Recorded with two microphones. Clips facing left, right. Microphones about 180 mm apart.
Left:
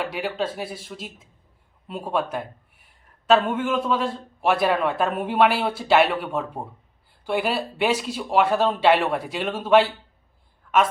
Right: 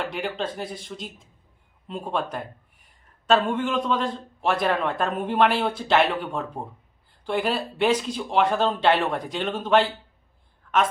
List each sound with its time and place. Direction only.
0.0 s speech: 5° left (ahead or behind)